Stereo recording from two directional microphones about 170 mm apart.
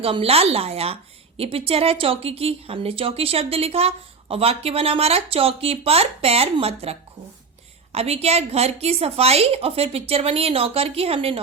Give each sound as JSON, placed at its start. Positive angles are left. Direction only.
{"t": 0.0, "sound": "a woman's voice", "side_deg": -35}
{"t": 7.9, "sound": "a woman's voice", "side_deg": -40}